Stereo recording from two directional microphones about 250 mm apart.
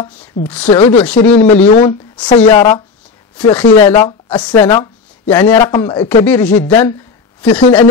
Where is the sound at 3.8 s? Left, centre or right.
Centre.